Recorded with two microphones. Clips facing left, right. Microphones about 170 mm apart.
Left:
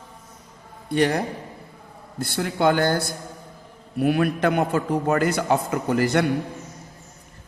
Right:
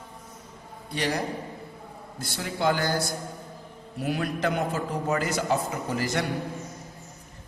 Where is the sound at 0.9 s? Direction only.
55° left (ahead or behind).